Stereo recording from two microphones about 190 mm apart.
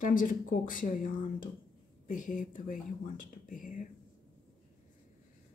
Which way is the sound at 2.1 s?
45° left (ahead or behind).